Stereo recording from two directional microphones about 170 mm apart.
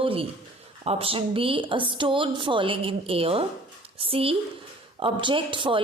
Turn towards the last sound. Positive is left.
turn(degrees=-30)  # may be behind; listen again after turning